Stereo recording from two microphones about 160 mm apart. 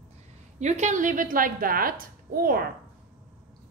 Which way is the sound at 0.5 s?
45° right (ahead or behind).